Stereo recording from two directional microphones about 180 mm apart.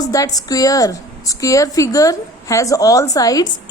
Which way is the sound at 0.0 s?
20° left (ahead or behind).